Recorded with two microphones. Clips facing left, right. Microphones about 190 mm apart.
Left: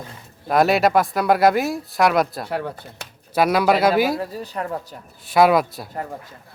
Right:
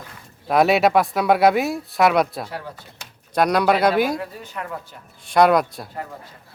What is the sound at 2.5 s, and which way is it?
Speech, 60° left (ahead or behind).